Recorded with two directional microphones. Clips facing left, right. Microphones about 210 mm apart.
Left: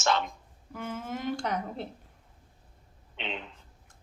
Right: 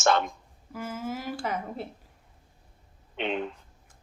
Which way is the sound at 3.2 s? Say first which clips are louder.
Right 8 dB; 50° right (ahead or behind).